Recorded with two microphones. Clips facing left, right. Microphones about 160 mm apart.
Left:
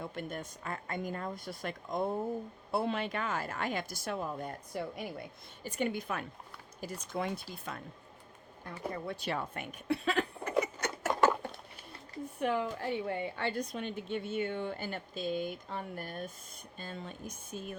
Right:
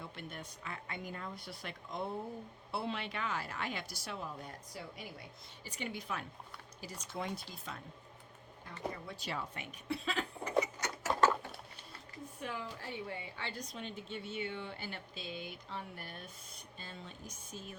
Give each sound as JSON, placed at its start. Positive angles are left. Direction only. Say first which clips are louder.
{"t": 0.0, "sound": "a woman's voice", "louder": "left 7 dB", "side_deg": 45}
{"t": 9.0, "sound": "speech", "louder": "left 6 dB", "side_deg": 60}
{"t": 10.6, "sound": "rodents", "louder": "left 3 dB", "side_deg": 55}
{"t": 12.4, "sound": "a woman's voice", "louder": "left 11 dB", "side_deg": 60}